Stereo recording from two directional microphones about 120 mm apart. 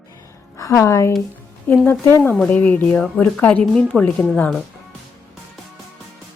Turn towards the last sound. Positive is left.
turn(degrees=10)  # may be behind; listen again after turning